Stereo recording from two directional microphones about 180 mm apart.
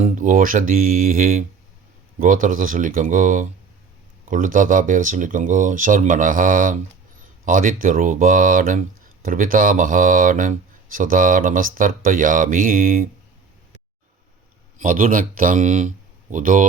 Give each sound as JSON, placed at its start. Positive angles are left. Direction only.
{"t": 0.0, "sound": "speech", "side_deg": -45}
{"t": 14.8, "sound": "speech", "side_deg": -45}